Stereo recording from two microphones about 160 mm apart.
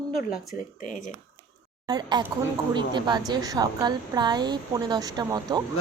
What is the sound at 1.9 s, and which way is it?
A woman's voice, 25° right (ahead or behind).